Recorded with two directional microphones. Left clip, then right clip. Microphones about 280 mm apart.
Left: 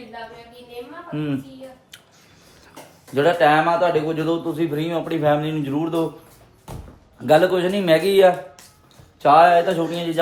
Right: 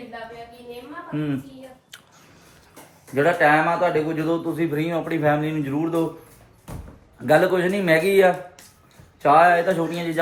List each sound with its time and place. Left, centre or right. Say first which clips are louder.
3.2 s speech: left 2 dB; centre
7.3 s speech: left 2 dB; centre